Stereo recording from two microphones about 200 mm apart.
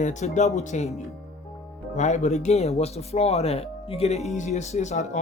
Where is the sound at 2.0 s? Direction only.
35° left (ahead or behind).